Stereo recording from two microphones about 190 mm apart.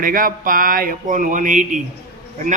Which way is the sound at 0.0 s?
45° right (ahead or behind).